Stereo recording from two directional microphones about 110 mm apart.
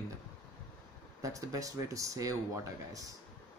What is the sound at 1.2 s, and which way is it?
Speech, 30° right (ahead or behind).